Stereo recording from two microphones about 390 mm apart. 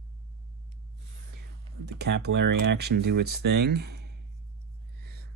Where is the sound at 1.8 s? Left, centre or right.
Right.